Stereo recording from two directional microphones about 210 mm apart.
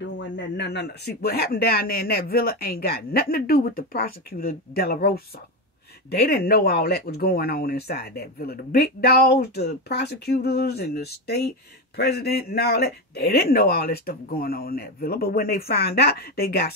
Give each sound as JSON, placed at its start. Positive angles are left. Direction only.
{"t": 0.2, "sound": "speech", "side_deg": 55}